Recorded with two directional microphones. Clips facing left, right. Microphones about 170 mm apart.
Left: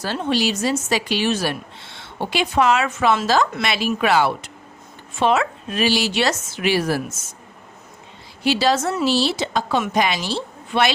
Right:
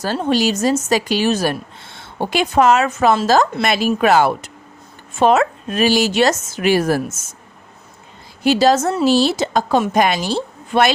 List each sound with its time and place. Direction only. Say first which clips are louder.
0.0 s a woman's voice: right 4 dB; 45° right (ahead or behind)
8.4 s a woman's voice: right 5 dB; 45° right (ahead or behind)